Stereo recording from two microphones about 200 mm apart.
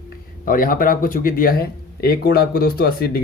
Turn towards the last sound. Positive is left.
turn(degrees=50)  # may be behind; listen again after turning